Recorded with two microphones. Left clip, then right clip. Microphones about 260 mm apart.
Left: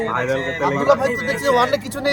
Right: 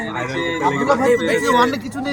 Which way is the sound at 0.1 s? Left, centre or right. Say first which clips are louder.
Left 2 dB; centre.